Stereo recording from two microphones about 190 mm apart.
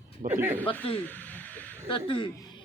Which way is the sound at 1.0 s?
10° left (ahead or behind).